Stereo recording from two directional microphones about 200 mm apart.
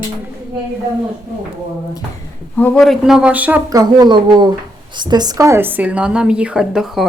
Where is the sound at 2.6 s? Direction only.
5° left (ahead or behind).